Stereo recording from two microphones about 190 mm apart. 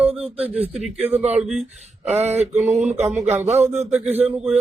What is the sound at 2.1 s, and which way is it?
Speech, 35° right (ahead or behind).